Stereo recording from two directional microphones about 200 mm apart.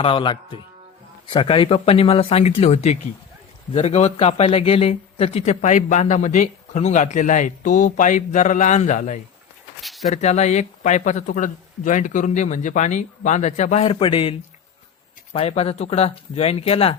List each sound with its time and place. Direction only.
0.0 s speech: 25° left (ahead or behind)
9.8 s a sound: centre (ahead or behind)
10.1 s speech: 35° left (ahead or behind)